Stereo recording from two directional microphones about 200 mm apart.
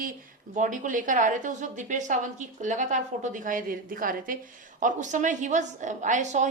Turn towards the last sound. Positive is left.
turn(degrees=-35)  # may be behind; listen again after turning